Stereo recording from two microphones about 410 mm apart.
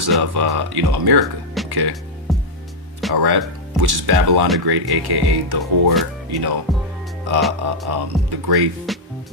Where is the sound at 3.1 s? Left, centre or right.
Right.